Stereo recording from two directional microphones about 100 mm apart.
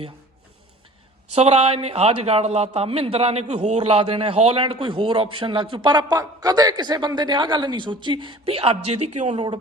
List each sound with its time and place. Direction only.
1.4 s a man's voice: 85° right; by 5.9 s 60° right (ahead or behind)
5.9 s a man's voice: 45° right (ahead or behind); by 9.4 s 90° right